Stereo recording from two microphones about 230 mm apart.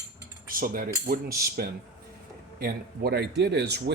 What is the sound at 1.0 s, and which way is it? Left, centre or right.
A man's voice, right.